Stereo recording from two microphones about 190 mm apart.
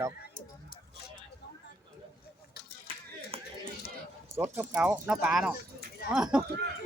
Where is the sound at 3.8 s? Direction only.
55° left (ahead or behind).